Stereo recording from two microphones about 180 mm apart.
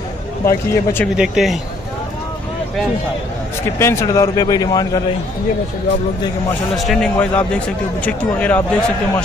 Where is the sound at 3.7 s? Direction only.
15° left (ahead or behind).